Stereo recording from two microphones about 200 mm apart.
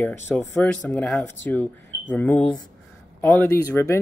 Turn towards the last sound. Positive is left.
turn(degrees=15)  # may be behind; listen again after turning